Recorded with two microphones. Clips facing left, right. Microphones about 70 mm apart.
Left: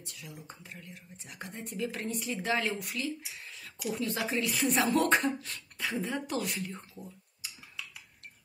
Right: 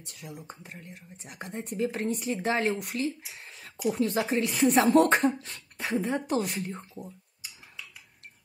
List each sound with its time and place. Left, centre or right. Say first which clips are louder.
0.0 s speech: right 4 dB; right
5.4 s speech: right 1 dB; right